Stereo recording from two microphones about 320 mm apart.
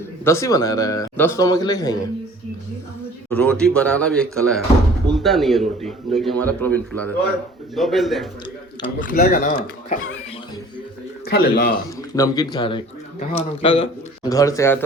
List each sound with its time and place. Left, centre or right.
0.3 s speech: centre
3.2 s a man's voice: centre
8.8 s speech: left
11.3 s a man's voice: left
12.1 s speech: centre